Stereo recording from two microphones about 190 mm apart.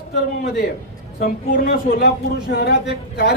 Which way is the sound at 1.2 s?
55° left (ahead or behind).